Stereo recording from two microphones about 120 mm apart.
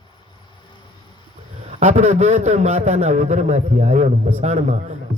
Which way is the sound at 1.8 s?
80° right.